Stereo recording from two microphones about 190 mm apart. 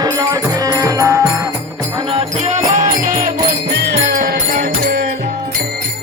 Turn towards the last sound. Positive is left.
turn(degrees=-50)  # may be behind; listen again after turning